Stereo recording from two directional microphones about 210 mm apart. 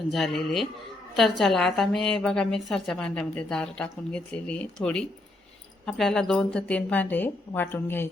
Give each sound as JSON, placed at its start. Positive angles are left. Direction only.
{"t": 0.1, "sound": "a woman's voice", "side_deg": 0}